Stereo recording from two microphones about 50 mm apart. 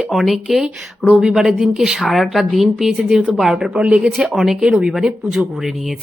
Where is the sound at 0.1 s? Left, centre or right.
Centre.